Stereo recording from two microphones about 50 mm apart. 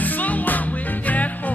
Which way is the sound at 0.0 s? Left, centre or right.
Left.